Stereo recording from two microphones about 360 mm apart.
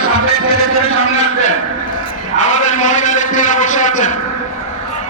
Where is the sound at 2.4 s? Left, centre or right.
Centre.